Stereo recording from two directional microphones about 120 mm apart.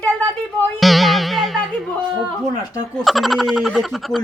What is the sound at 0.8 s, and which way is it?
Music, centre (ahead or behind).